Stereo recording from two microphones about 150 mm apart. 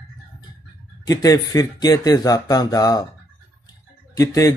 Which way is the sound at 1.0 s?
25° left (ahead or behind).